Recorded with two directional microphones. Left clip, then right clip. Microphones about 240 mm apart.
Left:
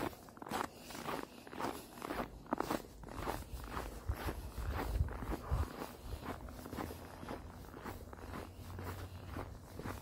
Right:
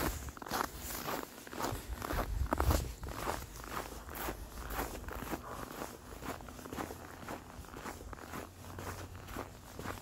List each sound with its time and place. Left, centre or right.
0.0 s biting: right
7.8 s zipper: right
9.3 s walk: right